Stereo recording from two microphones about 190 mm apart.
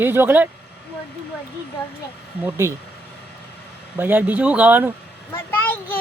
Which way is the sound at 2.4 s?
15° right (ahead or behind).